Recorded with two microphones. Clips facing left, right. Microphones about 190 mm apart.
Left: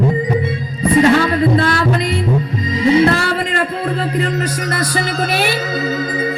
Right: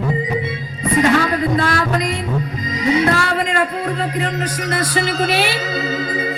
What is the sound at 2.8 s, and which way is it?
Speech, 30° left (ahead or behind).